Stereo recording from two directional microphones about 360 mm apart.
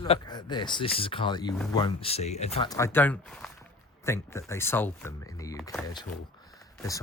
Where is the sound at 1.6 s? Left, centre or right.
Centre.